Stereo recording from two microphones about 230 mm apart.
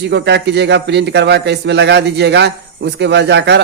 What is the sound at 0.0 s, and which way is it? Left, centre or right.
A man's voice, right.